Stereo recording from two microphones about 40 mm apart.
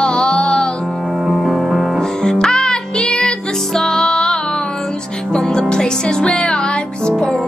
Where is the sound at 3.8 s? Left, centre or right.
Centre.